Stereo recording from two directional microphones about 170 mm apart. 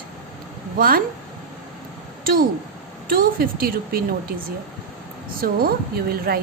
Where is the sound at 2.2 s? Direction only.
60° right (ahead or behind).